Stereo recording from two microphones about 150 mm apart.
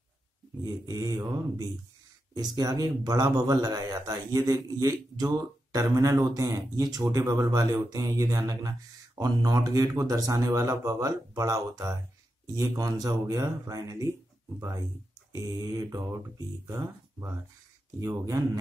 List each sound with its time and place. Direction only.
0.8 s speech: 20° right (ahead or behind)